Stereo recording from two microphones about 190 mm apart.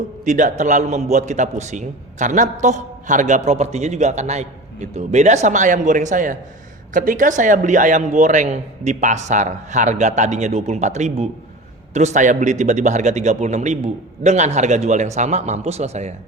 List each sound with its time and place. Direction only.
0.3 s a man's voice: 40° right (ahead or behind)